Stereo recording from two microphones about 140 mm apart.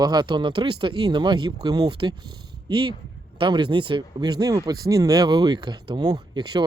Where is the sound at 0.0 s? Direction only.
30° right (ahead or behind).